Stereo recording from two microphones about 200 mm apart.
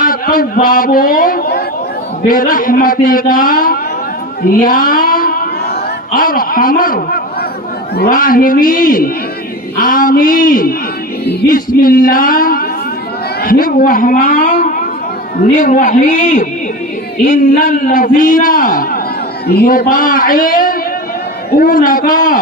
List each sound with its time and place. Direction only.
0.0 s a man's voice: 45° left (ahead or behind)
4.4 s a sound: 45° left (ahead or behind)
6.1 s a man's voice: 45° left (ahead or behind)
21.6 s a man's voice: 45° left (ahead or behind)